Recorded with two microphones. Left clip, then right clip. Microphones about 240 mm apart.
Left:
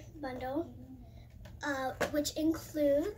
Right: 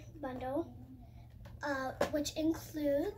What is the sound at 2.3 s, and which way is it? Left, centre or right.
Speech, right.